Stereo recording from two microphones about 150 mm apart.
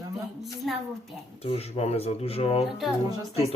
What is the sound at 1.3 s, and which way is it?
Speech, 45° left (ahead or behind).